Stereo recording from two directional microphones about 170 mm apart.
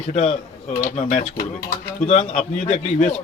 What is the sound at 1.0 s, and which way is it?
Speech, 50° left (ahead or behind).